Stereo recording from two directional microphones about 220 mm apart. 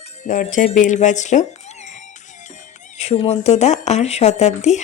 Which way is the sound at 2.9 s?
30° left (ahead or behind).